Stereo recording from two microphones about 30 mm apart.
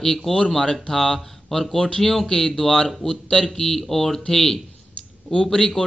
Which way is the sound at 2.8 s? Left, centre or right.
Left.